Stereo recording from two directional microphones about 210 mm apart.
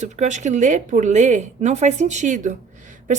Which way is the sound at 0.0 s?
35° right (ahead or behind).